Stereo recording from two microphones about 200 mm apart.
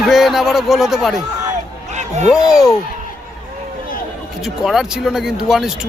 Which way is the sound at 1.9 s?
35° right (ahead or behind).